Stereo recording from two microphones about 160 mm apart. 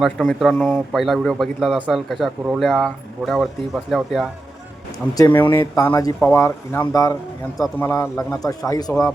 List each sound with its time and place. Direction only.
0.0 s a man's voice: centre (ahead or behind)
5.1 s speech: 15° left (ahead or behind)